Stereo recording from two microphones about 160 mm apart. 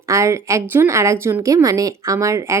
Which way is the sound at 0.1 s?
20° right (ahead or behind).